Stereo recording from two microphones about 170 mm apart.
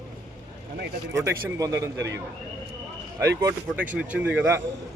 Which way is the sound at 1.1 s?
15° right (ahead or behind).